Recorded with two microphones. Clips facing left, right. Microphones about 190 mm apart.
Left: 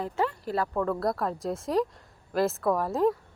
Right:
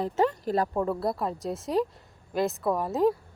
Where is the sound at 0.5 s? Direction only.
20° right (ahead or behind).